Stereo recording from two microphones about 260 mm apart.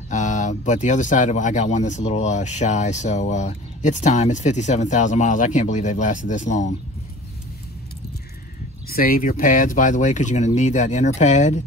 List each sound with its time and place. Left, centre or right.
0.1 s speech: left
8.8 s speech: left